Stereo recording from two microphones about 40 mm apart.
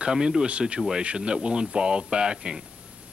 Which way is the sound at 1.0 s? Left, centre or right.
Right.